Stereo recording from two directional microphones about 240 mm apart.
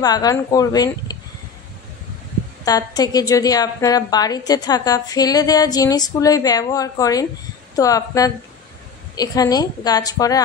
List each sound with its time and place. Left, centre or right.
0.0 s a woman's voice: centre
2.6 s a woman's voice: centre